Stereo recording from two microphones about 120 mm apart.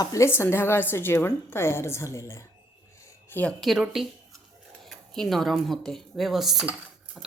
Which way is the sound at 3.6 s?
5° right (ahead or behind).